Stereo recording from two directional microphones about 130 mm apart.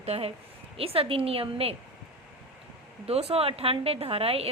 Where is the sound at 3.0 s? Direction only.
50° right (ahead or behind).